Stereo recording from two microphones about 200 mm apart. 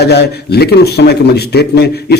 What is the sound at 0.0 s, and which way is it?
A man's voice, 55° left (ahead or behind).